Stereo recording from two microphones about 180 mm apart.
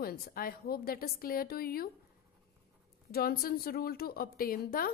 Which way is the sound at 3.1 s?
55° left (ahead or behind).